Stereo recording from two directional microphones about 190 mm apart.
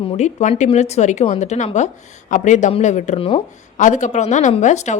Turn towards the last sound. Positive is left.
turn(degrees=40)  # may be behind; listen again after turning